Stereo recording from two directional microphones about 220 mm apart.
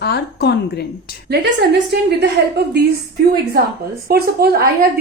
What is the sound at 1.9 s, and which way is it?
Speech, 50° right (ahead or behind).